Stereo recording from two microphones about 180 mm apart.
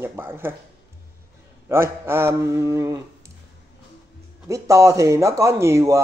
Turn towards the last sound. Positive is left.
turn(degrees=-15)  # may be behind; listen again after turning